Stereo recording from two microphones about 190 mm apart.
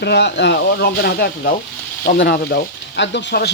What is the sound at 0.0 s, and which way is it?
Speech, 65° left (ahead or behind).